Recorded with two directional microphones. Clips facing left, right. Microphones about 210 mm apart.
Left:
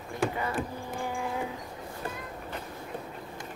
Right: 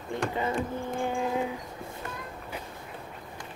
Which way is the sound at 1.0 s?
20° right (ahead or behind).